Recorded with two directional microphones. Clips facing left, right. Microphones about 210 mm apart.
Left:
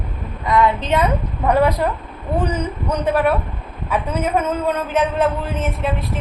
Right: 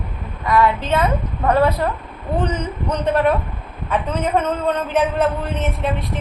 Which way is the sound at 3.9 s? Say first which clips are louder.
Even; 10° left (ahead or behind).